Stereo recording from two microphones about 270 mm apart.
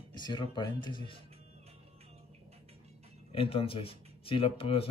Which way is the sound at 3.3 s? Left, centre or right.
Left.